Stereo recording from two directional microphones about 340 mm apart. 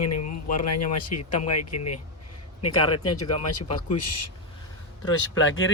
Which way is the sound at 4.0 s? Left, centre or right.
Left.